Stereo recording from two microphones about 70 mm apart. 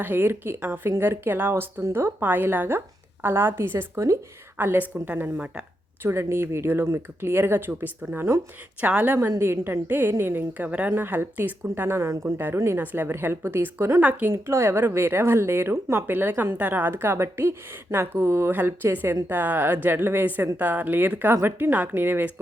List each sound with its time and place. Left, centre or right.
0.0 s speech: right
2.2 s speech: right
3.9 s speech: right
4.5 s speech: right
6.0 s speech: right
8.8 s speech: right
9.4 s speech: right
11.7 s speech: right
12.8 s speech: right
14.0 s speech: right
14.3 s speech: right